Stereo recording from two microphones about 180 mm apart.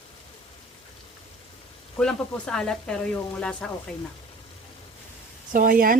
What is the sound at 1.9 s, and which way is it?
Speech, 5° left (ahead or behind).